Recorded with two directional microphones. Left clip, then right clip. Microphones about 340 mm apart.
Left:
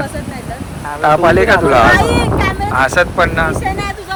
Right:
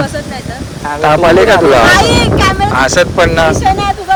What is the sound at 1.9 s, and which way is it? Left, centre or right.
Speech, centre.